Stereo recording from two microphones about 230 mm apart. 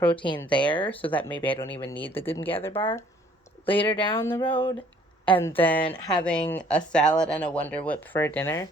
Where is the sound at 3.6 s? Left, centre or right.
Left.